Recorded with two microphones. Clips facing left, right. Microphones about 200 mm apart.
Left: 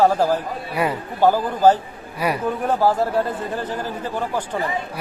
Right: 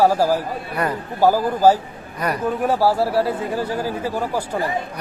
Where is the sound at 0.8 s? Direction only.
10° left (ahead or behind).